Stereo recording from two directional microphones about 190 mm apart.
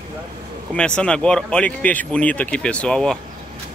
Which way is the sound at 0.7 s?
5° left (ahead or behind).